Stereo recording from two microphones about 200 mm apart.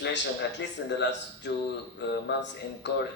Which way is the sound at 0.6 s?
60° left (ahead or behind).